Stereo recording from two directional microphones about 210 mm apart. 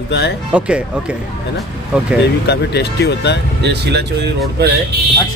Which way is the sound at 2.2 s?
50° left (ahead or behind).